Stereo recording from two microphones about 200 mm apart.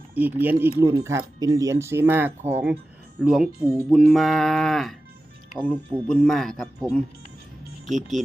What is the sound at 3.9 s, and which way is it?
Speech, centre (ahead or behind).